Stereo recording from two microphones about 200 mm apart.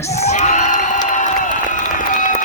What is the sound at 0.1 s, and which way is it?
Crowd, 35° left (ahead or behind).